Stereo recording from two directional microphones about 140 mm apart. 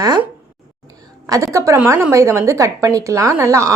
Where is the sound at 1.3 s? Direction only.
20° right (ahead or behind).